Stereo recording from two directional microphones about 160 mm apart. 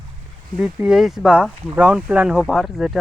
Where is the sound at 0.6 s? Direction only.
5° right (ahead or behind).